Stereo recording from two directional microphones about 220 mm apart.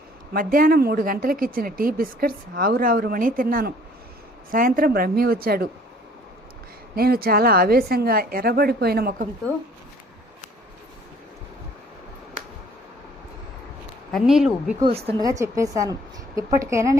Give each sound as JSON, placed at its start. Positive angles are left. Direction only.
{"t": 0.3, "sound": "a woman's voice", "side_deg": -40}
{"t": 6.9, "sound": "a woman's voice", "side_deg": -45}
{"t": 14.1, "sound": "speech", "side_deg": 0}
{"t": 14.8, "sound": "speech", "side_deg": -25}
{"t": 15.2, "sound": "a woman's voice", "side_deg": -15}